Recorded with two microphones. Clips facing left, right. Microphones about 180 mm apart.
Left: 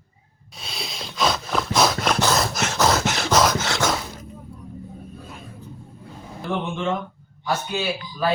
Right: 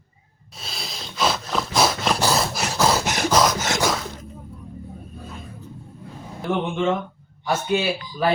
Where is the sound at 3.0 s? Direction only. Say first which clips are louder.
Even; 15° right (ahead or behind).